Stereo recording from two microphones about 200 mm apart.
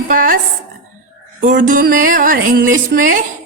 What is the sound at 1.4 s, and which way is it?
A woman's voice, 40° right (ahead or behind).